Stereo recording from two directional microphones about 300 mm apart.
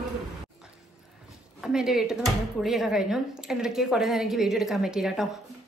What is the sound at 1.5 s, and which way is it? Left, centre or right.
A woman's voice, centre.